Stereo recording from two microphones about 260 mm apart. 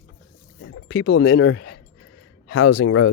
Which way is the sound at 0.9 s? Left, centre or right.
Left.